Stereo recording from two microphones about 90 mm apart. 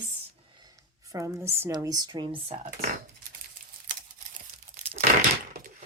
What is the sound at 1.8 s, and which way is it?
Speech, 45° right (ahead or behind).